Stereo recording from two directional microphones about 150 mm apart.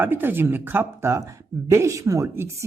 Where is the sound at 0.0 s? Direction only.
15° right (ahead or behind).